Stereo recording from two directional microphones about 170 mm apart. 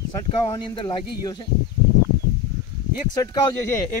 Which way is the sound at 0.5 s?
25° left (ahead or behind).